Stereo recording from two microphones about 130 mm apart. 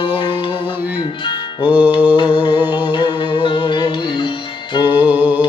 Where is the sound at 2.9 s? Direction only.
35° left (ahead or behind).